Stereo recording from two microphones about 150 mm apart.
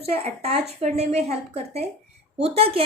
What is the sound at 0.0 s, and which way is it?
A woman's voice, 40° right (ahead or behind).